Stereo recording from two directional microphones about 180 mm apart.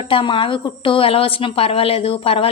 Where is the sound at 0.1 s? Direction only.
30° left (ahead or behind).